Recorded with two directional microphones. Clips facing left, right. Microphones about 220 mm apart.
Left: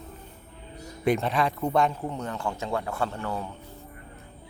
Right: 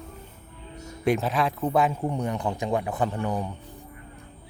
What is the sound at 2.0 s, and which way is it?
Speech, 15° right (ahead or behind).